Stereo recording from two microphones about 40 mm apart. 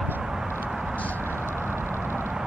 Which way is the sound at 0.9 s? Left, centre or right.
Left.